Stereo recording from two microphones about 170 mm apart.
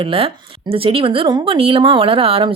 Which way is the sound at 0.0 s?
30° right (ahead or behind).